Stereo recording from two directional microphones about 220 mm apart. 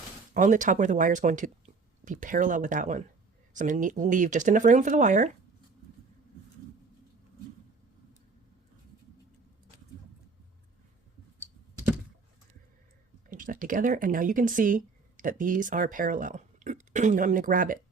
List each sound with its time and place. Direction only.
0.3 s speech: 35° right (ahead or behind)
13.3 s speech: 40° right (ahead or behind)